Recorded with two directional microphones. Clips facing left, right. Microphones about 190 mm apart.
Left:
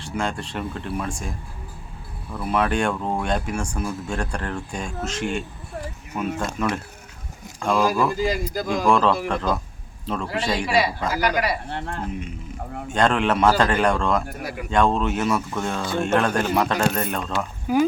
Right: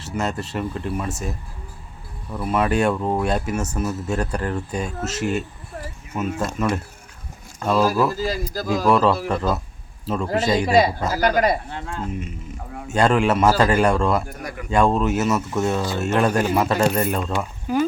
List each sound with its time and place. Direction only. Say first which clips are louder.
0.0 s speech: right 2 dB; 5° right (ahead or behind)
2.4 s speech: right 2 dB; 5° right (ahead or behind)
11.1 s speech: right 4 dB; 45° right (ahead or behind)
11.7 s speech: left 1 dB; 60° left (ahead or behind)
12.9 s speech: right 2 dB; 5° right (ahead or behind)
17.7 s speech: left 1 dB; 10° left (ahead or behind)